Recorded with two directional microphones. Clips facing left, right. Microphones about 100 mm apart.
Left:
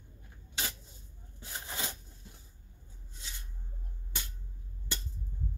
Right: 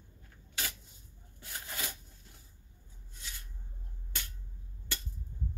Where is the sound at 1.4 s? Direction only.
25° left (ahead or behind).